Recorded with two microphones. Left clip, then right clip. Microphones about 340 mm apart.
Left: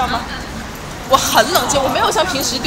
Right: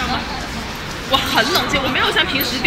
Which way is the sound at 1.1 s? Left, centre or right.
Centre.